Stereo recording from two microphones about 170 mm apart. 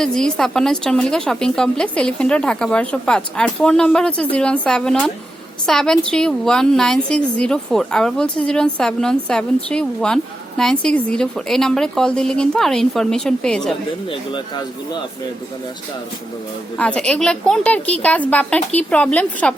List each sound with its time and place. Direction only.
0.0 s a woman's voice: 5° left (ahead or behind)
14.1 s speech: 25° left (ahead or behind)
16.7 s a woman's voice: 5° left (ahead or behind)